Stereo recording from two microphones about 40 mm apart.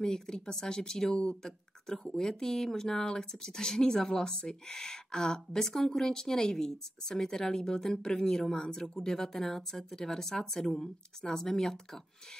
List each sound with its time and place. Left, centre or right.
0.0 s speech: centre